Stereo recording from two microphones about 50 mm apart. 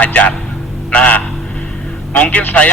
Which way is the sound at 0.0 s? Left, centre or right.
Left.